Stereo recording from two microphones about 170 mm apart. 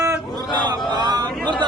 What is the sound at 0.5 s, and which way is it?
Speech, 25° right (ahead or behind).